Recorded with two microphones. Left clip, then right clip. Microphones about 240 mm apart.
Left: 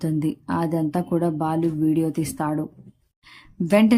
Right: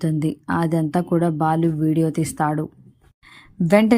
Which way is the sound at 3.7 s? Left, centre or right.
Centre.